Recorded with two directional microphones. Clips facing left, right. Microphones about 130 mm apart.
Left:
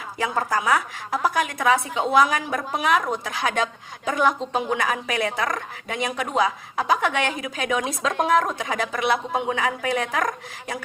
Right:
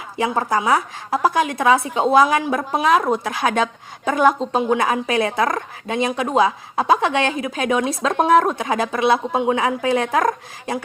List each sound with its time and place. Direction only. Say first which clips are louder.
0.2 s a woman's voice: right 4 dB; 25° right (ahead or behind)